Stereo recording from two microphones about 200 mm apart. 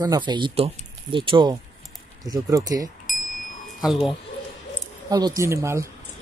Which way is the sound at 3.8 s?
5° right (ahead or behind).